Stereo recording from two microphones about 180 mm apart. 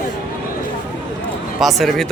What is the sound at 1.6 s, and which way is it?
Speech, centre (ahead or behind).